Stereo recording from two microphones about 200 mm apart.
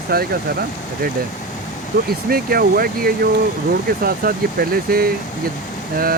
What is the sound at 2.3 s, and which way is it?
Speech, 50° right (ahead or behind).